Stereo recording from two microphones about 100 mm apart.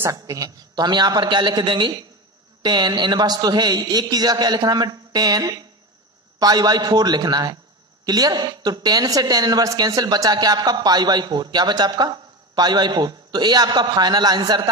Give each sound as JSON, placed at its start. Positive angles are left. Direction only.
{"t": 0.0, "sound": "a woman's voice", "side_deg": -35}